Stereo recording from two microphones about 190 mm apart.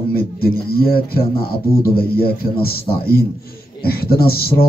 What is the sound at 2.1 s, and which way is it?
Speech, 55° left (ahead or behind).